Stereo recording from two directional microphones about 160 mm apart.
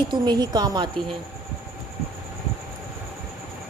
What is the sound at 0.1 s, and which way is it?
Speech, 25° right (ahead or behind).